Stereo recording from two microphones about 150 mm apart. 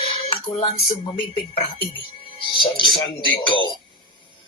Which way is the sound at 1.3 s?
40° left (ahead or behind).